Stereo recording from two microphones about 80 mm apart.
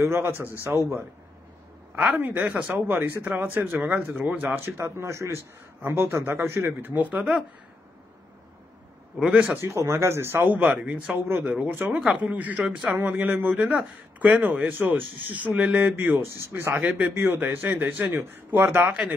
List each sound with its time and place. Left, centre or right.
0.0 s speech: right
2.1 s speech: right
9.2 s speech: centre
9.6 s speech: right
11.1 s speech: centre
11.7 s speech: right
16.7 s speech: centre
17.1 s speech: right